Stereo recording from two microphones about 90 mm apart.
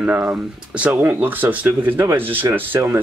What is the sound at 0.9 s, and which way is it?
Speech, 25° right (ahead or behind).